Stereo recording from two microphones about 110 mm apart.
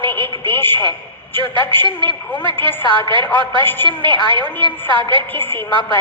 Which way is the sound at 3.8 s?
45° right (ahead or behind).